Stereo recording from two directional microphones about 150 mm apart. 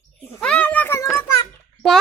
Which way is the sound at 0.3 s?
5° left (ahead or behind).